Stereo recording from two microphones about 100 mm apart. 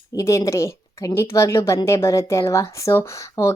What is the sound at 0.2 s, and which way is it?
A woman's voice, 30° left (ahead or behind).